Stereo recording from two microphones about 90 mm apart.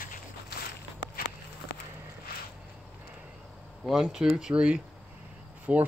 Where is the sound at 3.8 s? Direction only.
5° right (ahead or behind).